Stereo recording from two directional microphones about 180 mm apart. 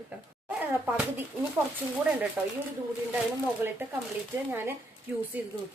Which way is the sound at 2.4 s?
10° right (ahead or behind).